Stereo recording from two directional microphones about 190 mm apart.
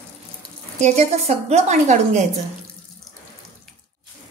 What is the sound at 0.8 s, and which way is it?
A woman's voice, 35° right (ahead or behind).